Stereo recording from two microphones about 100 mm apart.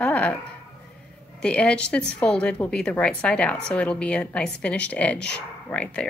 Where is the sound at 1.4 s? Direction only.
10° left (ahead or behind).